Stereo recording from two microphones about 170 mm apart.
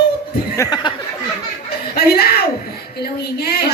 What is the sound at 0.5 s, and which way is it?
Speech, 20° left (ahead or behind).